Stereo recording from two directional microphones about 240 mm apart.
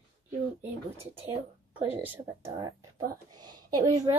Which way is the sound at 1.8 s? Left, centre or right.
Centre.